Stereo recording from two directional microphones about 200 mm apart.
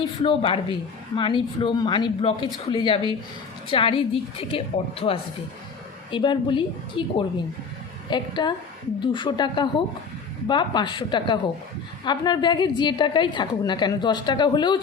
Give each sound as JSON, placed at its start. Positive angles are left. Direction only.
{"t": 0.2, "sound": "a woman's voice", "side_deg": 25}
{"t": 8.1, "sound": "a woman's voice", "side_deg": 20}